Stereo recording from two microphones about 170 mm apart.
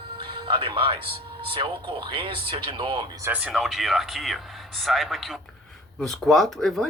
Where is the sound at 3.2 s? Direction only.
5° right (ahead or behind).